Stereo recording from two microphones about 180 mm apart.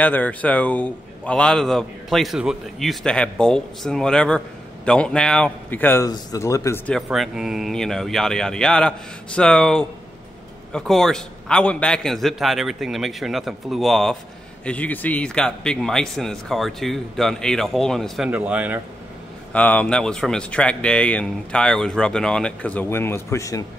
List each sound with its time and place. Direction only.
0.0 s speech: 10° left (ahead or behind)
6.9 s speech: centre (ahead or behind)
19.5 s speech: 10° left (ahead or behind)